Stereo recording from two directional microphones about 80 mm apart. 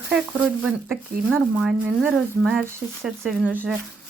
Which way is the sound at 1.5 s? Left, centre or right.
Centre.